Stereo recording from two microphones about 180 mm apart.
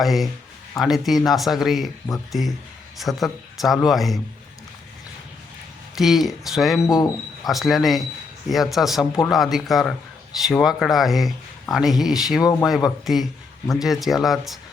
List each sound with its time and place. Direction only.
0.0 s speech: centre (ahead or behind)
6.0 s speech: centre (ahead or behind)
6.8 s speech: 20° left (ahead or behind)
7.4 s speech: centre (ahead or behind)